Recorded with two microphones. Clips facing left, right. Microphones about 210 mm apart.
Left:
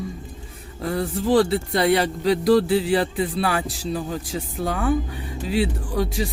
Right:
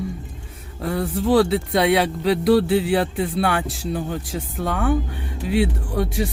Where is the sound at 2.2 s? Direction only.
60° right (ahead or behind).